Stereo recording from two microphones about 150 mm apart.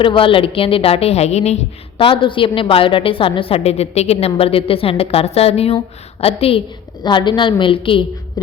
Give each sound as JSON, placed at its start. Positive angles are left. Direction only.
{"t": 0.0, "sound": "a woman's voice", "side_deg": 35}